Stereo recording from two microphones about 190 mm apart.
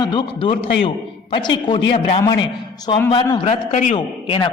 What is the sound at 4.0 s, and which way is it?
Speech, 25° left (ahead or behind).